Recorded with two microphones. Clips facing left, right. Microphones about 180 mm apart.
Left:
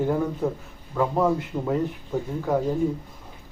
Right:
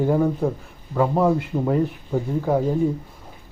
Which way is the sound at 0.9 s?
10° right (ahead or behind).